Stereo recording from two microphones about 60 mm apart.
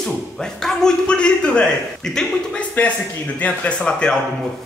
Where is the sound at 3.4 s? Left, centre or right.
Left.